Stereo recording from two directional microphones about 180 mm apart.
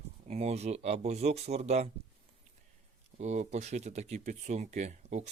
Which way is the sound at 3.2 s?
40° right (ahead or behind).